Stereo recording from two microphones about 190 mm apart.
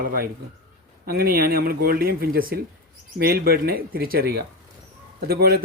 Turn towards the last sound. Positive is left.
turn(degrees=-55)  # may be behind; listen again after turning